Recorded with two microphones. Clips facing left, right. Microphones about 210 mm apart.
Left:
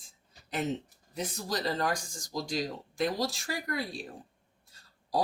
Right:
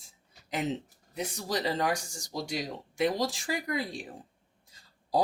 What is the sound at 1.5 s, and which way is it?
Speech, 15° right (ahead or behind).